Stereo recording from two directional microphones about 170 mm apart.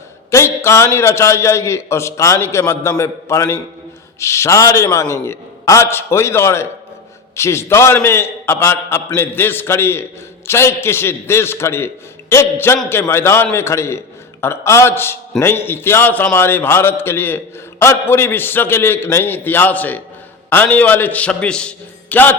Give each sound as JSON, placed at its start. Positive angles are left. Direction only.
{"t": 0.3, "sound": "a man's voice", "side_deg": 15}